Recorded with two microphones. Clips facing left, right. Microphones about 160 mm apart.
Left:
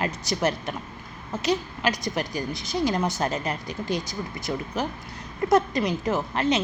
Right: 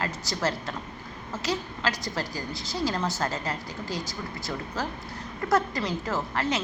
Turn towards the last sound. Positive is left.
turn(degrees=20)  # may be behind; listen again after turning